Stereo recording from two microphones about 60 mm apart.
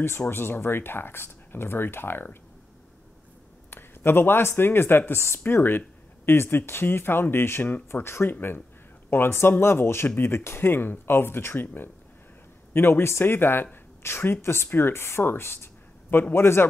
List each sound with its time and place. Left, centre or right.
0.3 s speech: left
3.7 s speech: left